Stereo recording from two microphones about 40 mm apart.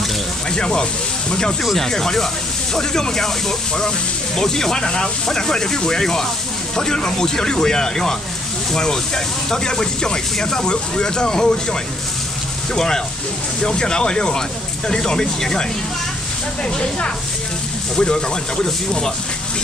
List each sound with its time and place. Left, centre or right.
0.5 s speech: centre
12.7 s speech: centre
17.9 s speech: centre